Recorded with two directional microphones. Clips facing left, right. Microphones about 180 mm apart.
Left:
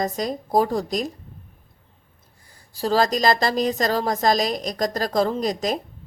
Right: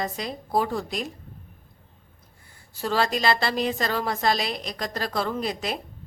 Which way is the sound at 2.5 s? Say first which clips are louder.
Left 5 dB; 35° left (ahead or behind).